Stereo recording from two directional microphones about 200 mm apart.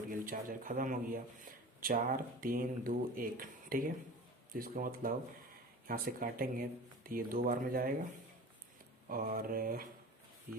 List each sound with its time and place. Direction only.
0.1 s speech: 45° right (ahead or behind)
9.0 s speech: 45° right (ahead or behind)